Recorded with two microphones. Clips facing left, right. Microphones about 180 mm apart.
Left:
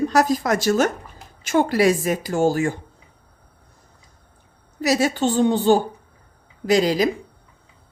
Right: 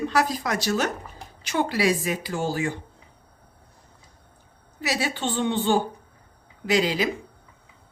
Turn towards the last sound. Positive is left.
turn(degrees=40)  # may be behind; listen again after turning